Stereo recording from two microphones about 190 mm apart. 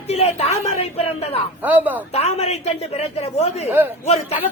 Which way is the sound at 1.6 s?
10° right (ahead or behind).